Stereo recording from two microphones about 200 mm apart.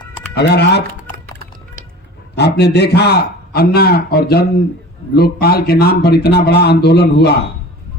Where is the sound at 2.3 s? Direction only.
55° left (ahead or behind).